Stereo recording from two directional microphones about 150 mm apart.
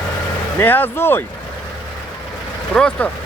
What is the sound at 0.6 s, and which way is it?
Speech, 15° left (ahead or behind).